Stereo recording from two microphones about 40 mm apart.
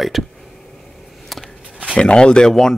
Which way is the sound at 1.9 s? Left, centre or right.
Left.